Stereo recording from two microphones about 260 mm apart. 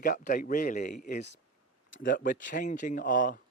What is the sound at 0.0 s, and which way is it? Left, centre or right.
Speech, left.